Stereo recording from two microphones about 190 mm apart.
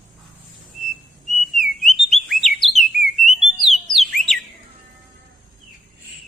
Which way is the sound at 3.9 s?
Centre (ahead or behind).